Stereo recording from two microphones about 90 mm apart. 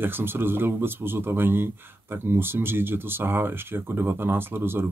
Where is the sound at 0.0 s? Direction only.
25° right (ahead or behind).